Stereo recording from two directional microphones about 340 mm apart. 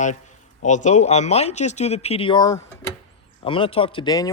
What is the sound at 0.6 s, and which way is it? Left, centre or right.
A man's voice, left.